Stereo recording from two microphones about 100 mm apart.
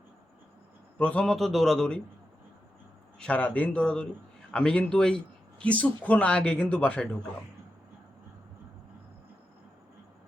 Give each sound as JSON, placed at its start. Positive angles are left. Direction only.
{"t": 0.9, "sound": "a man's voice", "side_deg": 10}
{"t": 3.2, "sound": "speech", "side_deg": 15}